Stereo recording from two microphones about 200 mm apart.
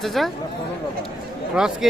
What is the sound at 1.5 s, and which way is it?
Speech, 5° right (ahead or behind).